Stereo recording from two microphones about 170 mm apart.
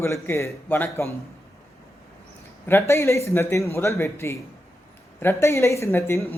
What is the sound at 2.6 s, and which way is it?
Speech, 15° left (ahead or behind).